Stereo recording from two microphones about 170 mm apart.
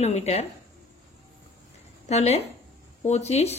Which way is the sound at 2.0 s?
40° left (ahead or behind).